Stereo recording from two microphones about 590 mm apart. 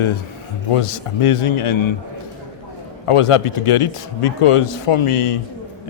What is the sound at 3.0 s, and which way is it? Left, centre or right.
A man's voice, left.